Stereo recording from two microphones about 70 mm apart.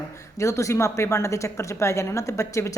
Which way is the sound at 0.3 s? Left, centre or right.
Left.